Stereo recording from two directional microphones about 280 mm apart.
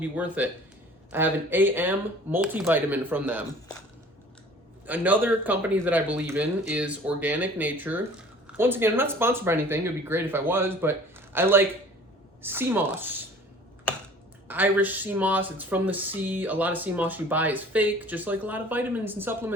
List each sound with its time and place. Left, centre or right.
0.0 s speech: centre
4.9 s speech: centre
14.4 s speech: centre